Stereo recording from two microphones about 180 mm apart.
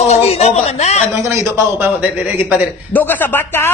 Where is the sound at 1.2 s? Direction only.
15° right (ahead or behind).